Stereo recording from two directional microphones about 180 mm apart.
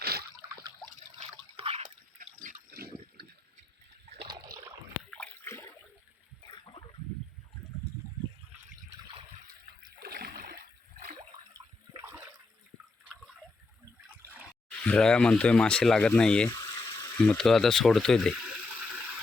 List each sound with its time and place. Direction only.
0.0 s a sound: 60° right (ahead or behind)
1.2 s liquid: 30° right (ahead or behind)
2.1 s drip: 45° right (ahead or behind)
4.3 s a sound: 20° right (ahead or behind)
5.1 s water: 10° left (ahead or behind)
10.0 s splash: 60° right (ahead or behind)
11.5 s toilet flush: 15° right (ahead or behind)
14.7 s speech: 5° left (ahead or behind)
16.5 s water: 20° left (ahead or behind)
17.2 s speech: centre (ahead or behind)